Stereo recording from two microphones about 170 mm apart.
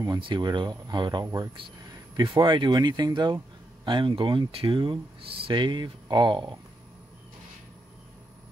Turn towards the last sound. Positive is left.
turn(degrees=-25)  # may be behind; listen again after turning